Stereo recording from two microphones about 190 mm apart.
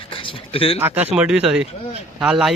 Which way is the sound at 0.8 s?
10° right (ahead or behind).